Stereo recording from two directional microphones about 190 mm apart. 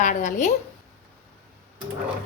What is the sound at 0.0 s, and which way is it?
Speech, 40° left (ahead or behind).